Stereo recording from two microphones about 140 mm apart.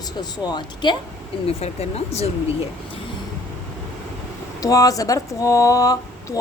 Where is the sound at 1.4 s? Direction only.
50° left (ahead or behind).